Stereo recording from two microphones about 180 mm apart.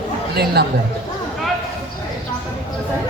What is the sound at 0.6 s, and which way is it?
Speech, 60° right (ahead or behind).